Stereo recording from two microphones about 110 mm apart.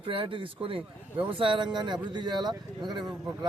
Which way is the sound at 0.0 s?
50° right (ahead or behind).